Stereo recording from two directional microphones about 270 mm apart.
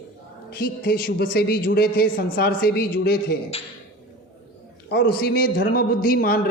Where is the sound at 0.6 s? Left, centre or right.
Left.